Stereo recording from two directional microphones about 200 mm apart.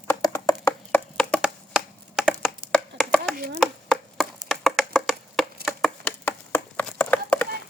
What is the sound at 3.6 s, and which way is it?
Chopping, centre (ahead or behind).